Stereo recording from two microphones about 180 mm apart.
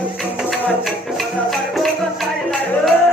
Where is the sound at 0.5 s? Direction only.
Centre (ahead or behind).